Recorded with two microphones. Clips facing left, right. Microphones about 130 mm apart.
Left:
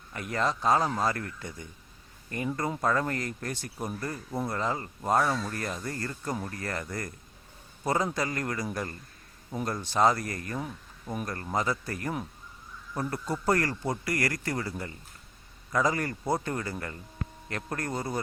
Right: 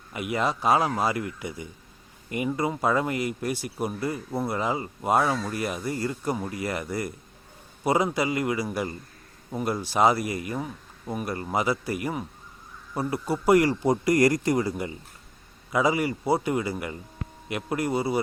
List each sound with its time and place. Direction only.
0.1 s speech: 10° right (ahead or behind)